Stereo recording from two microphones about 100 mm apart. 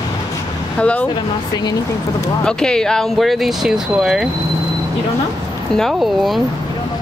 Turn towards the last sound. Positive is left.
turn(degrees=0)  # may be behind; listen again after turning